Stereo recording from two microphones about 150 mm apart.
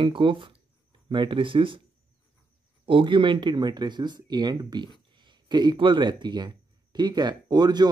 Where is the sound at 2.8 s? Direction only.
35° right (ahead or behind).